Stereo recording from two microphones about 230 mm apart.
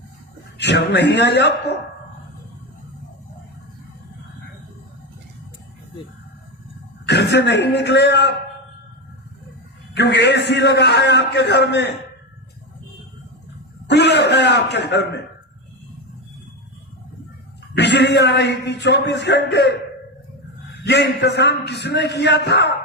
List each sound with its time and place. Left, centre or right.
0.6 s a man's voice: left
7.0 s a man's voice: left
9.9 s a man's voice: left
13.8 s a man's voice: left
17.7 s a man's voice: left
20.8 s a man's voice: left